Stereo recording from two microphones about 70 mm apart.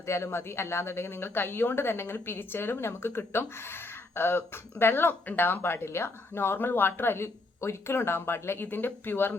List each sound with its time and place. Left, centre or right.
0.0 s speech: left